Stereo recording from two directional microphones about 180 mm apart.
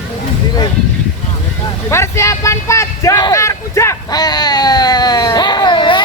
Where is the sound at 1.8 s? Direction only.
15° left (ahead or behind).